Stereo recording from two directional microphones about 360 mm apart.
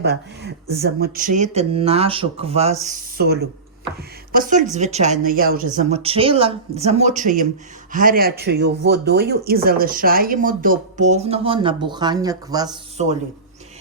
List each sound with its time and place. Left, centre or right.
0.0 s speech: right